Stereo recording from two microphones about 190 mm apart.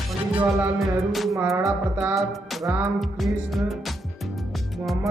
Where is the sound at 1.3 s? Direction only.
15° right (ahead or behind).